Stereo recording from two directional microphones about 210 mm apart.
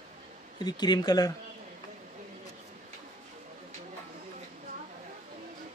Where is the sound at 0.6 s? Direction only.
20° left (ahead or behind).